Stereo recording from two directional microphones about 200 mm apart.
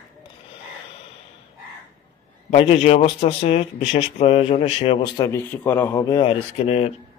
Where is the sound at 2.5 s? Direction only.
30° left (ahead or behind).